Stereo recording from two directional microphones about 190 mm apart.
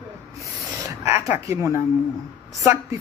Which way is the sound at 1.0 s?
15° right (ahead or behind).